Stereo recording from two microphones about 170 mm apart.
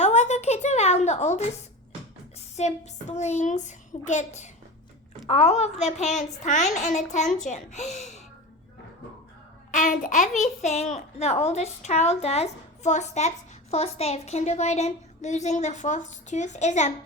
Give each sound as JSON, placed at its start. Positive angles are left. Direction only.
{"t": 0.0, "sound": "a sound", "side_deg": 40}
{"t": 2.6, "sound": "a child's voice", "side_deg": 40}
{"t": 9.7, "sound": "a child's voice", "side_deg": 50}